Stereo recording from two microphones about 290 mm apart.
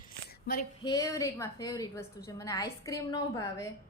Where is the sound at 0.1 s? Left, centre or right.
Left.